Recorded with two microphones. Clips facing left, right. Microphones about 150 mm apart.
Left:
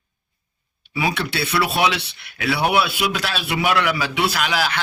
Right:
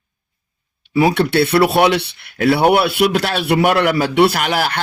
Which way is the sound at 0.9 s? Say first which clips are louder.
Right 10 dB; 55° right (ahead or behind).